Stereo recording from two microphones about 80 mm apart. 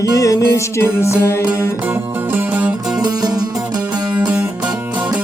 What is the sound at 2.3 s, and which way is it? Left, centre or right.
Music, right.